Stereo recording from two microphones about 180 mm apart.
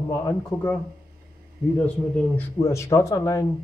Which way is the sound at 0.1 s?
15° left (ahead or behind).